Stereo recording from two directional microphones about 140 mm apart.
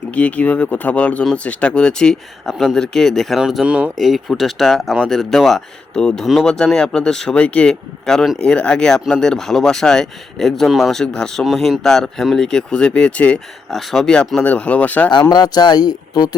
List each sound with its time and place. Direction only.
0.1 s speech: 10° left (ahead or behind)
15.3 s speech: 30° left (ahead or behind)